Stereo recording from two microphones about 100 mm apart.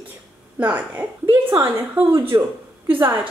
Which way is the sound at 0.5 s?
15° right (ahead or behind).